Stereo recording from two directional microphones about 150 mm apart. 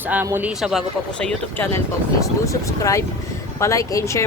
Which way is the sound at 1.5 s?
15° left (ahead or behind).